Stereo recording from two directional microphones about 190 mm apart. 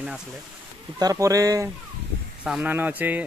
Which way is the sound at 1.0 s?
20° right (ahead or behind).